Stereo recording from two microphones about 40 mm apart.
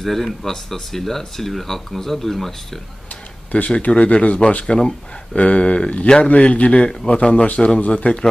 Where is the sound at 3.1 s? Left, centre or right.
Left.